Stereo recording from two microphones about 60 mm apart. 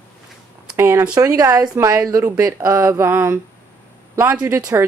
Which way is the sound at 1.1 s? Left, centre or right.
Right.